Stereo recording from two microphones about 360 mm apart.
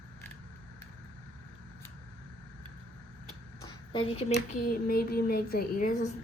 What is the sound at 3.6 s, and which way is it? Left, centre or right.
Speech, centre.